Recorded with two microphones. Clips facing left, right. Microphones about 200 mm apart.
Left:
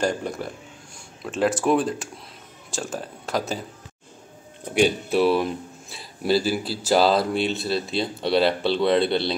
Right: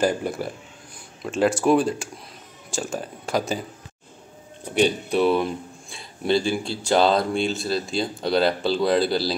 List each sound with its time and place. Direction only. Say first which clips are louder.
0.0 s speech: right 2 dB; 5° right (ahead or behind)
4.7 s speech: even; 5° left (ahead or behind)